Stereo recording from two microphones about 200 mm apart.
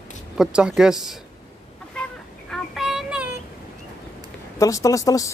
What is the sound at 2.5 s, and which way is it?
Child singing, centre (ahead or behind).